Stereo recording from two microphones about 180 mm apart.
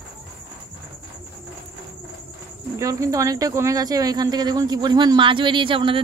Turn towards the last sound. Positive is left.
turn(degrees=-30)  # may be behind; listen again after turning